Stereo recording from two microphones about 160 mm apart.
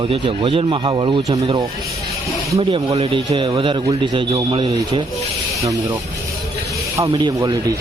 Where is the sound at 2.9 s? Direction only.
40° right (ahead or behind).